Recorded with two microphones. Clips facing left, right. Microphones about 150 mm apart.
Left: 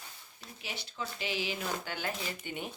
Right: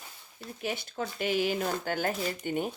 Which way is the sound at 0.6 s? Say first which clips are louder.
Right 7 dB; 50° right (ahead or behind).